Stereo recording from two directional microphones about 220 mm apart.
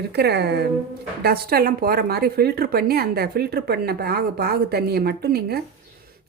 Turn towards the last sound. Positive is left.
turn(degrees=-45)  # may be behind; listen again after turning